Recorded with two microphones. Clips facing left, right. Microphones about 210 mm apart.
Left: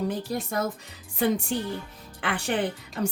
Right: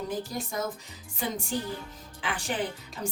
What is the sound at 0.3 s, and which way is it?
Speech, 65° left (ahead or behind).